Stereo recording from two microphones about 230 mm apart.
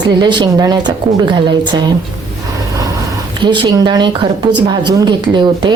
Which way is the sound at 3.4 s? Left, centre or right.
Centre.